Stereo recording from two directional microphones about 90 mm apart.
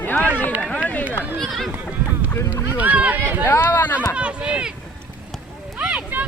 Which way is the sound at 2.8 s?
15° right (ahead or behind).